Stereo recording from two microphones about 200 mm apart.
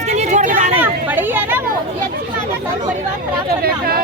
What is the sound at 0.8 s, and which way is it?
Speech, 10° right (ahead or behind).